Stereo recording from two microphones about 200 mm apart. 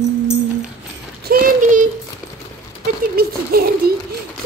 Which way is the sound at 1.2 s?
45° right (ahead or behind).